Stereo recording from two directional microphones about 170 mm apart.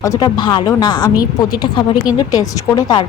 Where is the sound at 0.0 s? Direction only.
20° left (ahead or behind).